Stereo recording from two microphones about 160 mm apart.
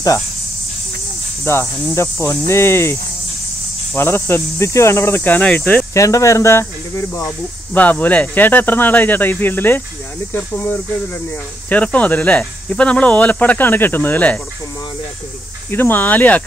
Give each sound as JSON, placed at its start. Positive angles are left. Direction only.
{"t": 1.4, "sound": "speech", "side_deg": 15}
{"t": 5.9, "sound": "speech", "side_deg": 20}
{"t": 15.7, "sound": "speech", "side_deg": 10}